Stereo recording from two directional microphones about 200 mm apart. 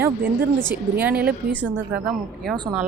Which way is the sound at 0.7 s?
10° right (ahead or behind).